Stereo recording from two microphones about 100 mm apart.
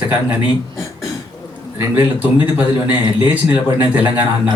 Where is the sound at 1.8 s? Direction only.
20° right (ahead or behind).